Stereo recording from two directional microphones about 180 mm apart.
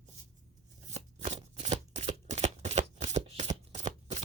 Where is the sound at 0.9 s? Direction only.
40° right (ahead or behind).